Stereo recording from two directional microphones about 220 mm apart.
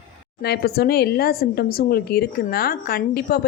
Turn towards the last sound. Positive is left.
turn(degrees=40)  # may be behind; listen again after turning